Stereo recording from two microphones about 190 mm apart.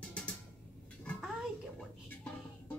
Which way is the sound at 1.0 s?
5° left (ahead or behind).